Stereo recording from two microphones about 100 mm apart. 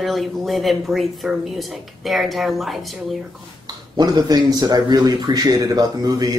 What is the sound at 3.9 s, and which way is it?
A man's voice, 40° right (ahead or behind).